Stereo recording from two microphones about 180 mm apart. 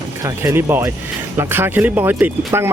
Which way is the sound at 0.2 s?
15° right (ahead or behind).